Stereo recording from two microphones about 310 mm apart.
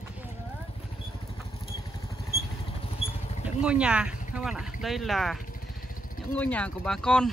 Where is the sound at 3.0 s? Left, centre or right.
Left.